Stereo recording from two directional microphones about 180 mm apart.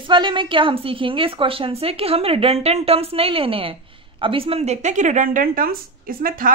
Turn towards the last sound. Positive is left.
turn(degrees=-50)  # may be behind; listen again after turning